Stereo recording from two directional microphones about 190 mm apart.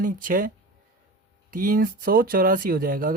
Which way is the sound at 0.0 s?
45° right (ahead or behind).